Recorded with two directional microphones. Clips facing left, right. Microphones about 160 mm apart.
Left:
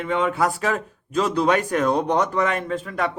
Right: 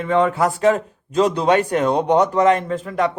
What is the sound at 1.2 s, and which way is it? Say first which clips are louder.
Speech: right 4 dB; 30° right (ahead or behind).